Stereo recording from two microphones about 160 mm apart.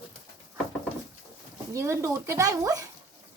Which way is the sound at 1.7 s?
20° right (ahead or behind).